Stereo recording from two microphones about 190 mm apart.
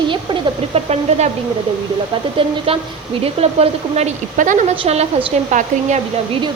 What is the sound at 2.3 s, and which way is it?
A woman's voice, 30° right (ahead or behind).